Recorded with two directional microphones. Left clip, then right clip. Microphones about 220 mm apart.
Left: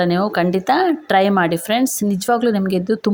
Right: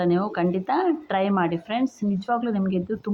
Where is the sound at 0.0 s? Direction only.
55° left (ahead or behind).